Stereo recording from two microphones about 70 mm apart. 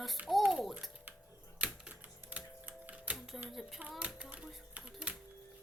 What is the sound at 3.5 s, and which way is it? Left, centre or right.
Speech, centre.